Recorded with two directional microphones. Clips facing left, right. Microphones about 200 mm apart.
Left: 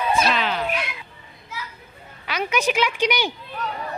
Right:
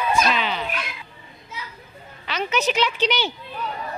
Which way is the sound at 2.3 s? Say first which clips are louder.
Even; 10° left (ahead or behind).